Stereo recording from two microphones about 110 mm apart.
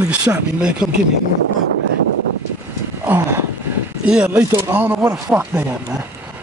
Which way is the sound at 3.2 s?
25° right (ahead or behind).